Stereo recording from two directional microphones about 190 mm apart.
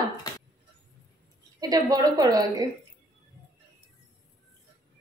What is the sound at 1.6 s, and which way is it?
A woman's voice, 20° right (ahead or behind).